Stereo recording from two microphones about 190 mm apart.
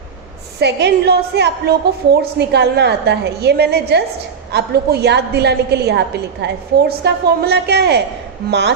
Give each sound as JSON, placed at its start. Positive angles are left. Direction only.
{"t": 0.6, "sound": "a woman's voice", "side_deg": -60}